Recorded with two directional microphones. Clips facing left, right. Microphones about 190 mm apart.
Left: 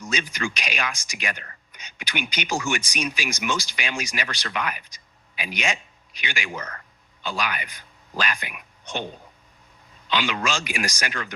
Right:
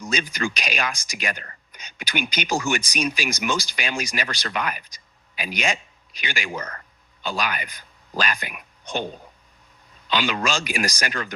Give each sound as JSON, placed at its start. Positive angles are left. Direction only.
{"t": 0.0, "sound": "speech", "side_deg": -35}
{"t": 10.1, "sound": "speech", "side_deg": -40}